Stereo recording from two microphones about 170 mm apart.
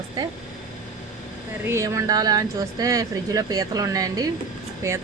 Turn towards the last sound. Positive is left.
turn(degrees=-20)  # may be behind; listen again after turning